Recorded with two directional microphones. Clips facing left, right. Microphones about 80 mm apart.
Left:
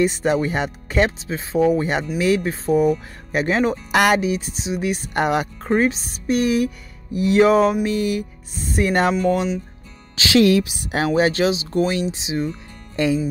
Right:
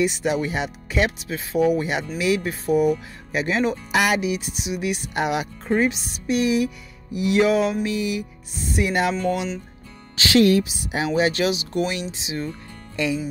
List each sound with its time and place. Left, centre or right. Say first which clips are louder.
0.0 s speech: left 3 dB; left
4.2 s speech: left 2 dB; left
7.8 s music: left 3 dB; left
10.4 s a woman's voice: left 2 dB; left
10.9 s speech: left 3 dB; left